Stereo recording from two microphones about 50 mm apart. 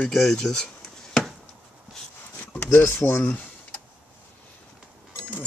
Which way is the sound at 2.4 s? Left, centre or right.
Left.